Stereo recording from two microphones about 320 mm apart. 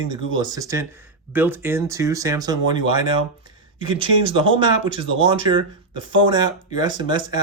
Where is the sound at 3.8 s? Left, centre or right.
Centre.